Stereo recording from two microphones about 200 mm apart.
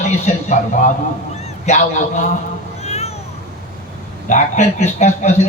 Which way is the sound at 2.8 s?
30° left (ahead or behind).